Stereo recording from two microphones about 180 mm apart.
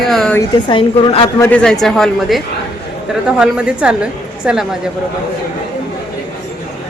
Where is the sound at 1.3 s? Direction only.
15° left (ahead or behind).